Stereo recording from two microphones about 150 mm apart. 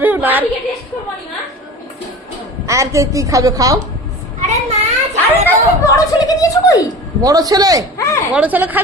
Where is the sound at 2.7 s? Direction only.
20° right (ahead or behind).